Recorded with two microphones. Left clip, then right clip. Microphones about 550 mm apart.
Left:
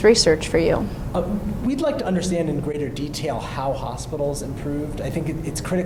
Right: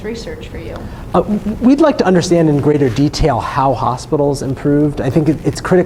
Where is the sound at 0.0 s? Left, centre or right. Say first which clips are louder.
Left 11 dB; left.